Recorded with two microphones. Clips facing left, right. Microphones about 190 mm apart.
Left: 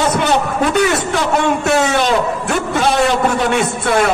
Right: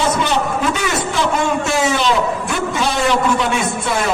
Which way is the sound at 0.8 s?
60° left (ahead or behind).